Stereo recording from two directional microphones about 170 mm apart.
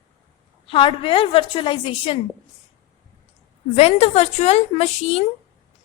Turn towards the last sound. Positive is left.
turn(degrees=35)  # may be behind; listen again after turning